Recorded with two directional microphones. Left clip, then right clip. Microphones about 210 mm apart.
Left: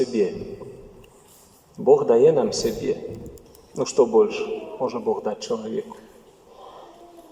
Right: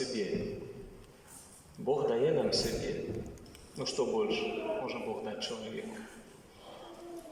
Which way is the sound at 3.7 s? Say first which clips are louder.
Left 15 dB; 50° left (ahead or behind).